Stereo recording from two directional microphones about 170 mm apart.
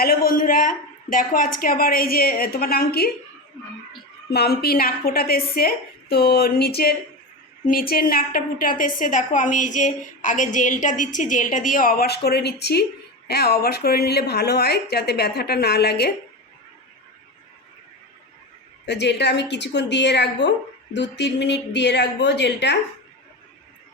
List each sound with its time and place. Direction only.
0.0 s a woman's voice: 60° left (ahead or behind)
4.3 s a woman's voice: 70° left (ahead or behind)
18.9 s a woman's voice: 85° left